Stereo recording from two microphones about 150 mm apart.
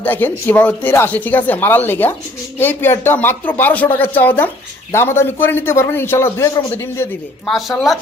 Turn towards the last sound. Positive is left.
turn(degrees=0)  # may be behind; listen again after turning